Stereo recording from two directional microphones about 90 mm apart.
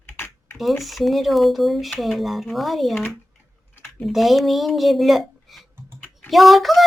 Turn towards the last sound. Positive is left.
turn(degrees=0)  # may be behind; listen again after turning